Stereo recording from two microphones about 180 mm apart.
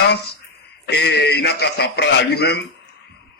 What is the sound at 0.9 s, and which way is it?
A man's voice, 70° left (ahead or behind).